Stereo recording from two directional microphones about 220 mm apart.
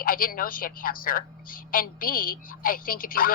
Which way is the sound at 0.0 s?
40° left (ahead or behind).